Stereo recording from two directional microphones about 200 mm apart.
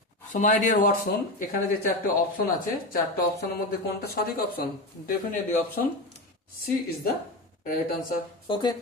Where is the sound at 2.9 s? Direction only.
50° left (ahead or behind).